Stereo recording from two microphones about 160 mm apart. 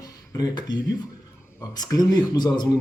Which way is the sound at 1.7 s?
25° left (ahead or behind).